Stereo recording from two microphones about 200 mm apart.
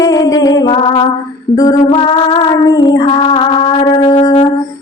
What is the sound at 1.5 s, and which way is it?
Female singing, 20° left (ahead or behind).